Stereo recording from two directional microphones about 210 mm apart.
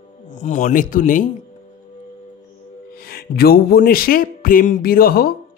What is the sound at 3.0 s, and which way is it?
Speech, 45° left (ahead or behind).